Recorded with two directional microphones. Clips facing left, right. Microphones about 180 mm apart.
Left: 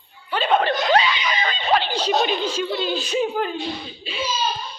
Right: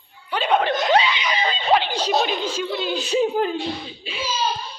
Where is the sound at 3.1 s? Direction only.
30° right (ahead or behind).